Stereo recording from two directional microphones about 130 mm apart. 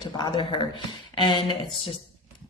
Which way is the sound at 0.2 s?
35° left (ahead or behind).